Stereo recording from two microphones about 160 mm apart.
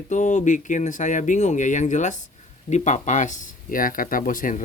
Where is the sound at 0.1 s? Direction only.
50° left (ahead or behind).